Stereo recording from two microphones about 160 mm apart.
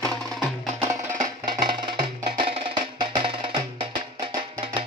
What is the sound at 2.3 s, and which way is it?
Music, 35° right (ahead or behind).